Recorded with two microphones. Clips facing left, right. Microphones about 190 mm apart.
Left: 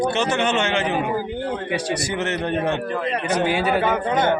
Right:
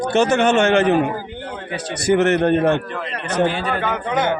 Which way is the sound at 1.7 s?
10° left (ahead or behind).